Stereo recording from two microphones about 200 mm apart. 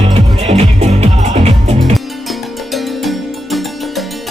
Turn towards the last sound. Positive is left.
turn(degrees=0)  # may be behind; listen again after turning